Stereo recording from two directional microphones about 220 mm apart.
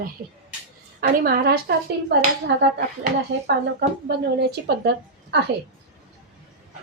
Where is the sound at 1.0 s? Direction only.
45° right (ahead or behind).